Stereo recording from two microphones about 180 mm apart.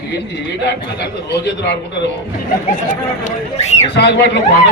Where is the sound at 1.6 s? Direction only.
70° left (ahead or behind).